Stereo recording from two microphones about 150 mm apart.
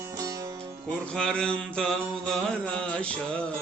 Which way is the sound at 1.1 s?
5° left (ahead or behind).